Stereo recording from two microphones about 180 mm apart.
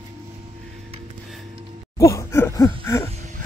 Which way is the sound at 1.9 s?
15° left (ahead or behind).